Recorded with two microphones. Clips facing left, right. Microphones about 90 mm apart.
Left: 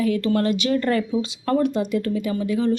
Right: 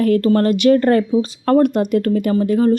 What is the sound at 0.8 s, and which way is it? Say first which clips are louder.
Speech: right 7 dB; 40° right (ahead or behind).